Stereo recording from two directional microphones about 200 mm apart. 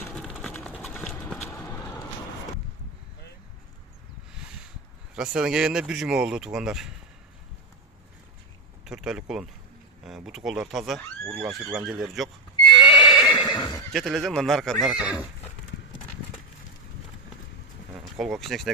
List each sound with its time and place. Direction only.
0.2 s a sound: centre (ahead or behind)
0.7 s clip-clop: 5° left (ahead or behind)
4.4 s a sound: 5° right (ahead or behind)
5.1 s speech: 5° right (ahead or behind)
8.8 s speech: 5° right (ahead or behind)
12.6 s horse: 25° left (ahead or behind)
13.9 s speech: centre (ahead or behind)
18.0 s speech: centre (ahead or behind)